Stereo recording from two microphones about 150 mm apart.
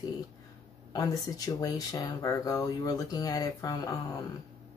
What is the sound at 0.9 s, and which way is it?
Speech, 25° left (ahead or behind).